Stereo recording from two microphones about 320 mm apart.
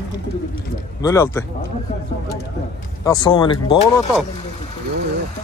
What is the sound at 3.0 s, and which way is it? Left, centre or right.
Speech, centre.